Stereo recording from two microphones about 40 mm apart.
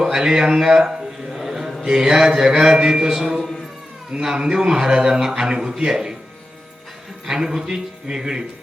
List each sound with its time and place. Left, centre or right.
0.0 s a sound: centre
1.8 s a man's voice: centre
4.1 s a man's voice: right
7.3 s a man's voice: centre